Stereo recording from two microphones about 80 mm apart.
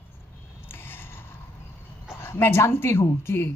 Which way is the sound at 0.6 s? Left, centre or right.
Left.